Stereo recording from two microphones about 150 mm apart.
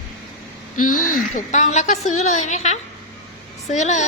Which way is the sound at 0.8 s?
65° left (ahead or behind).